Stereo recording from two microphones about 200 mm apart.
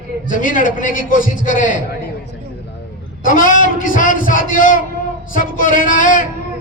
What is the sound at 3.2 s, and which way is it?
A man's voice, 45° left (ahead or behind).